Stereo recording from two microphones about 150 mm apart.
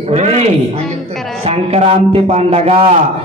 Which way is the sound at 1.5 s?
45° right (ahead or behind).